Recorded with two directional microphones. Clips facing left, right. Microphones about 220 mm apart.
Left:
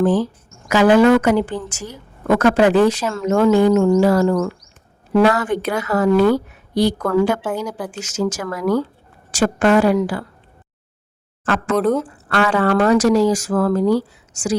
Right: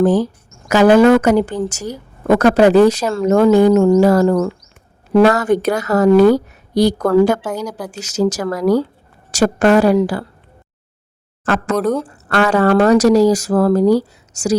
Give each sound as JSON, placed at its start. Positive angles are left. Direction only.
{"t": 0.0, "sound": "a woman's voice", "side_deg": -40}
{"t": 11.4, "sound": "a woman's voice", "side_deg": -40}
{"t": 11.8, "sound": "speech", "side_deg": 0}
{"t": 12.0, "sound": "a woman's voice", "side_deg": -45}